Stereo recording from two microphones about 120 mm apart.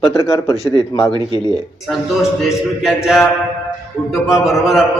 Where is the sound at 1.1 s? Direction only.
55° left (ahead or behind).